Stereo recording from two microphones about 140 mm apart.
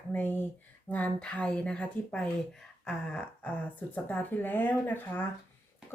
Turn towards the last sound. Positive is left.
turn(degrees=15)  # may be behind; listen again after turning